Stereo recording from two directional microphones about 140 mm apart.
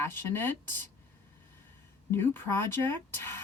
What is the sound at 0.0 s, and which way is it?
Speech, 15° left (ahead or behind).